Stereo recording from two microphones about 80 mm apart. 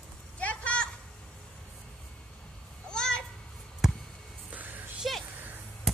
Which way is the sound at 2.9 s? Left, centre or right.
Centre.